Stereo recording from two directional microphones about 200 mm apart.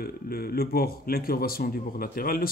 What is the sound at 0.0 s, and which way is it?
A man's voice, 50° left (ahead or behind).